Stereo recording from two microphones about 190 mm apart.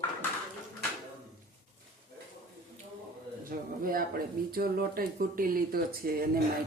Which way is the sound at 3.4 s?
50° right (ahead or behind).